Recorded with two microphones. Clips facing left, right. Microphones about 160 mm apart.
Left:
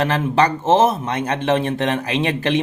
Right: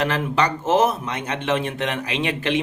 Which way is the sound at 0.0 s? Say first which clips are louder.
Left 4 dB; 30° left (ahead or behind).